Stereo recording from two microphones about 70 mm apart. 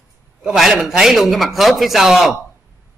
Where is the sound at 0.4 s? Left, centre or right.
Centre.